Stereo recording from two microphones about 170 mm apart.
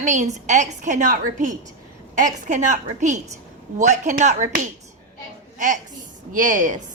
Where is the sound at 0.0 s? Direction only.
45° right (ahead or behind).